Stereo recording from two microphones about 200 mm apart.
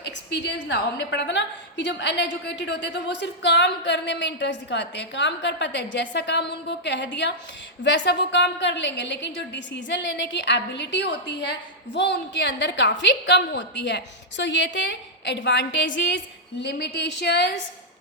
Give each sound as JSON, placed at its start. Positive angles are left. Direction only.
{"t": 0.0, "sound": "a woman's voice", "side_deg": 60}